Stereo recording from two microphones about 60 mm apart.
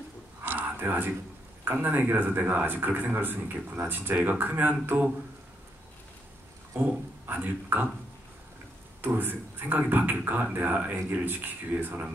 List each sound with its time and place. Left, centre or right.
0.4 s a sound: right
1.6 s speech: right
6.8 s speech: right
9.0 s speech: right